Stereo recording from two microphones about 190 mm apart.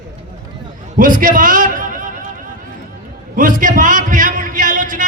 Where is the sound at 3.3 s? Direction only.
45° right (ahead or behind).